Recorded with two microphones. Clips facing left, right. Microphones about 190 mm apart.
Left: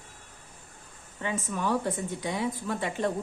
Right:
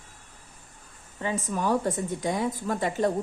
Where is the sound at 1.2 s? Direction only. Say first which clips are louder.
Right 3 dB; 35° right (ahead or behind).